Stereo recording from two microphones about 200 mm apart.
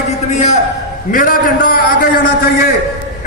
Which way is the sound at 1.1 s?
45° left (ahead or behind).